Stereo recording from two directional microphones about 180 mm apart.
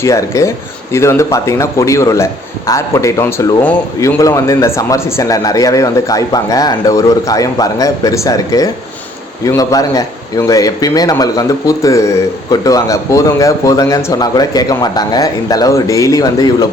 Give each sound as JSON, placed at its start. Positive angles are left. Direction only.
{"t": 0.0, "sound": "speech", "side_deg": 15}